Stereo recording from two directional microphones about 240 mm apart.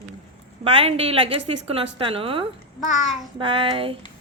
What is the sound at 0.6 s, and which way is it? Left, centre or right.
A woman's voice, right.